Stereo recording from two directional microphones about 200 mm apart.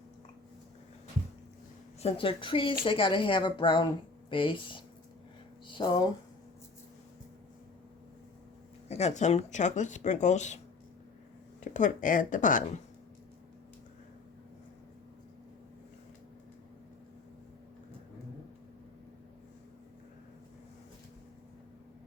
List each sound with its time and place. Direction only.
2.0 s speech: 30° left (ahead or behind)
8.9 s speech: 35° left (ahead or behind)
11.6 s speech: 40° left (ahead or behind)